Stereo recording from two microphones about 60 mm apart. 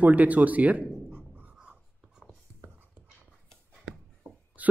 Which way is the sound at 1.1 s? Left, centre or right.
Right.